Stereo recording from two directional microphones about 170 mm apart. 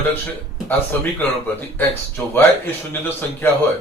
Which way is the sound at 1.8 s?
10° left (ahead or behind).